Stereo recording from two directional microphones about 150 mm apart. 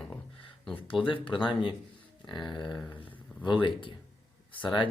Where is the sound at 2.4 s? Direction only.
30° left (ahead or behind).